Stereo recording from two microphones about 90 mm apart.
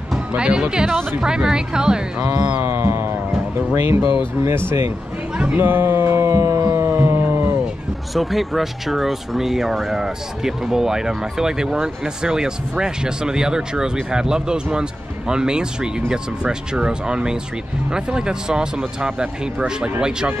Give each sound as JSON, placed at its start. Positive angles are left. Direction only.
{"t": 0.3, "sound": "speech", "side_deg": -10}
{"t": 2.6, "sound": "speech", "side_deg": -25}
{"t": 5.4, "sound": "a sound", "side_deg": -20}
{"t": 8.1, "sound": "speech", "side_deg": 0}